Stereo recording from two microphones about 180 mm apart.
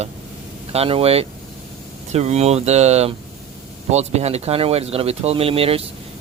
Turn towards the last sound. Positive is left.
turn(degrees=-30)  # may be behind; listen again after turning